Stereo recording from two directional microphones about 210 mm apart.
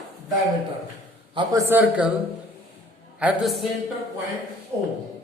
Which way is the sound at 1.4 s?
15° right (ahead or behind).